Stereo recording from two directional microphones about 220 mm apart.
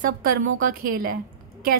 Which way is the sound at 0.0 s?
40° right (ahead or behind).